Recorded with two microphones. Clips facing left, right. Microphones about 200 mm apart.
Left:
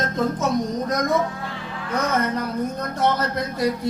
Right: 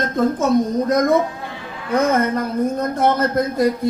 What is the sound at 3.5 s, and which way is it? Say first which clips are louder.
Speech: right 5 dB; 50° right (ahead or behind).